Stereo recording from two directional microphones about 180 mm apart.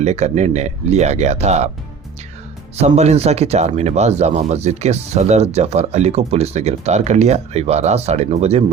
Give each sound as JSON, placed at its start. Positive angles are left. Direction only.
{"t": 0.0, "sound": "speech", "side_deg": -40}
{"t": 2.7, "sound": "speech", "side_deg": -35}